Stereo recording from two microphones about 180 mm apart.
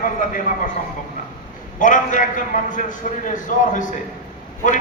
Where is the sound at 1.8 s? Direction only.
45° left (ahead or behind).